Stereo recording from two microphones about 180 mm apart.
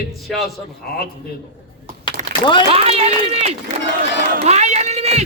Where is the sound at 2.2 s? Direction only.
40° right (ahead or behind).